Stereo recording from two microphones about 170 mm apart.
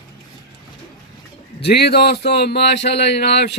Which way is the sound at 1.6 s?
75° left (ahead or behind).